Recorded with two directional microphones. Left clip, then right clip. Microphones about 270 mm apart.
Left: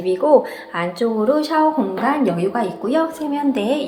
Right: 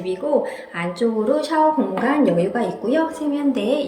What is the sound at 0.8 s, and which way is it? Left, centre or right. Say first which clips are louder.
A woman's voice: left 2 dB; centre.